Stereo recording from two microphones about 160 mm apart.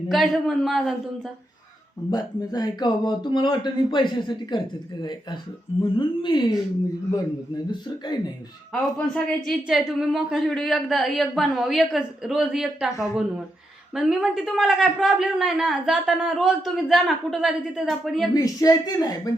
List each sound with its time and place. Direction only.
0.1 s speech: centre (ahead or behind)
2.0 s speech: 25° left (ahead or behind)
5.8 s speech: 30° left (ahead or behind)
8.7 s speech: 5° left (ahead or behind)
18.3 s speech: 20° left (ahead or behind)